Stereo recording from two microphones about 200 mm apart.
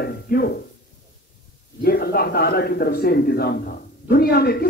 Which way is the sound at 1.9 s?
50° left (ahead or behind).